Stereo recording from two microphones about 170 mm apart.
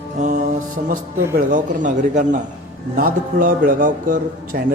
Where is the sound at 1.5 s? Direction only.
50° right (ahead or behind).